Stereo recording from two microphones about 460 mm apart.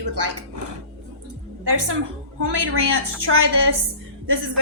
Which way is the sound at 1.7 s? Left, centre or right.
Right.